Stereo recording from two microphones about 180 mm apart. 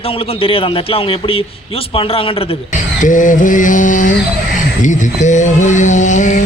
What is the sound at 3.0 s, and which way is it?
Music, 45° left (ahead or behind).